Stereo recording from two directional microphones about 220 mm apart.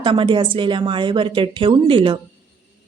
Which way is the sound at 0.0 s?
20° right (ahead or behind).